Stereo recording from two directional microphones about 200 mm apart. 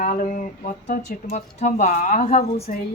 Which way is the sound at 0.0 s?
40° left (ahead or behind).